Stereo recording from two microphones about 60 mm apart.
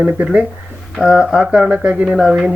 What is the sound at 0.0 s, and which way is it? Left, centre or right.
Speech, centre.